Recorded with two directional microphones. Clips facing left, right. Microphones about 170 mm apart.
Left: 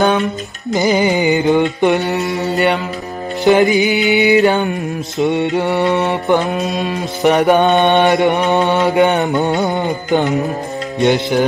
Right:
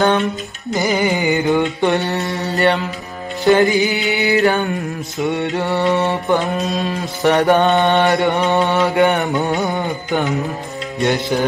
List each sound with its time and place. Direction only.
0.7 s mantra: 20° left (ahead or behind)
2.2 s mantra: 5° left (ahead or behind)
3.4 s mantra: 20° left (ahead or behind)
11.0 s mantra: 20° left (ahead or behind)